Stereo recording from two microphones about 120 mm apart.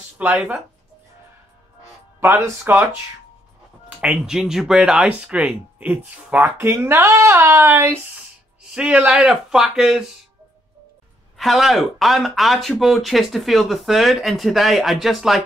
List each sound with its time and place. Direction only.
0.2 s speech: 15° right (ahead or behind)
2.1 s speech: 25° right (ahead or behind)
4.0 s speech: 5° right (ahead or behind)
11.3 s speech: centre (ahead or behind)